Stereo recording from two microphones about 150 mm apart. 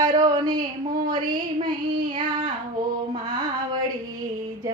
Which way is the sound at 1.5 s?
30° right (ahead or behind).